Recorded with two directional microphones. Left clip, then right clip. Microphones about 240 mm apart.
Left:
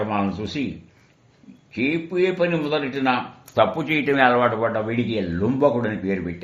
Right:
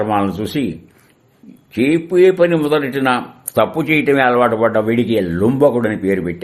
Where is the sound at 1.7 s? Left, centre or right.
Right.